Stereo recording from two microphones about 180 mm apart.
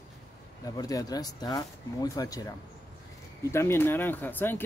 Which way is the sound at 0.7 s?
20° left (ahead or behind).